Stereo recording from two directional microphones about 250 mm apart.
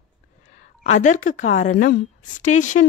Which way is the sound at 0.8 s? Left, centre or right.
Left.